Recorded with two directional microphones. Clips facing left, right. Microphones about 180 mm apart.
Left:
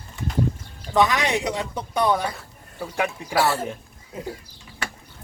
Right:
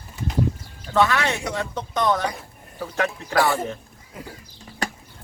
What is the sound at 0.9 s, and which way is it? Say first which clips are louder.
Speech: even; 15° left (ahead or behind).